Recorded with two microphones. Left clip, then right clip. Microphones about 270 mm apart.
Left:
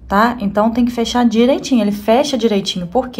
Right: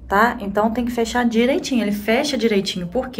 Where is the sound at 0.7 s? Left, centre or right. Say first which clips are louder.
Left 4 dB; left.